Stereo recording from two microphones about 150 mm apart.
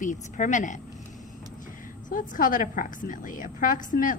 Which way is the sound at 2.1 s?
65° left (ahead or behind).